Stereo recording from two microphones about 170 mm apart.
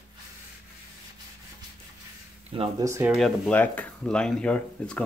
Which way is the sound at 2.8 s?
15° right (ahead or behind).